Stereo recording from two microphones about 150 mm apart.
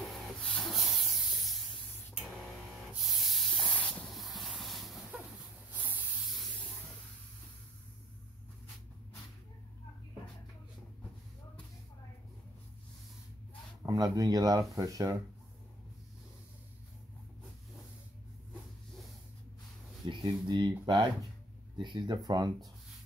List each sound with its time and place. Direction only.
0.0 s spray: 5° left (ahead or behind)
2.1 s a sound: centre (ahead or behind)
2.9 s spray: 5° right (ahead or behind)
5.7 s spray: 10° right (ahead or behind)
13.8 s speech: 25° right (ahead or behind)
20.1 s speech: 30° right (ahead or behind)